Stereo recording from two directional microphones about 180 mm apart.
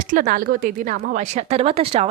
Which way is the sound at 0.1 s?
50° right (ahead or behind).